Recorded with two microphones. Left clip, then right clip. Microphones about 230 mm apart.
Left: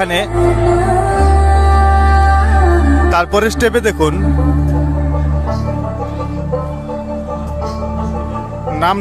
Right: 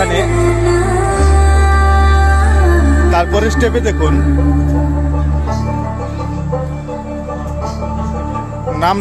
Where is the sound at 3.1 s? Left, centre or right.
Left.